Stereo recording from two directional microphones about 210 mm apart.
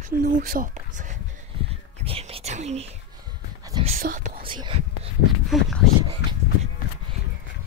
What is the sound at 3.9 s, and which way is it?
Speech, 40° right (ahead or behind).